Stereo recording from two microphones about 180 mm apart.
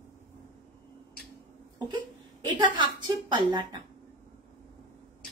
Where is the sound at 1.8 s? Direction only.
25° right (ahead or behind).